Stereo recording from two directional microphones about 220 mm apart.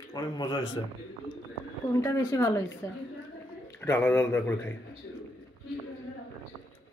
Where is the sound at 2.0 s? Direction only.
15° left (ahead or behind).